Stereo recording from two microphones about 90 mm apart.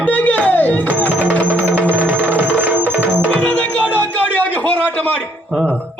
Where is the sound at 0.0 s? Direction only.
15° left (ahead or behind).